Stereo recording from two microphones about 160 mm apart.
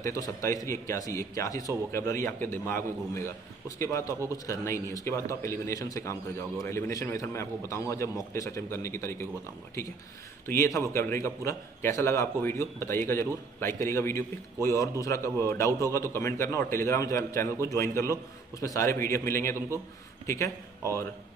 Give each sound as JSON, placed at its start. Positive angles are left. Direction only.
{"t": 0.0, "sound": "a man's voice", "side_deg": 20}
{"t": 10.4, "sound": "a man's voice", "side_deg": 20}